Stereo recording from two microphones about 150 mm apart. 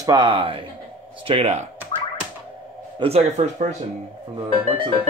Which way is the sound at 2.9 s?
40° right (ahead or behind).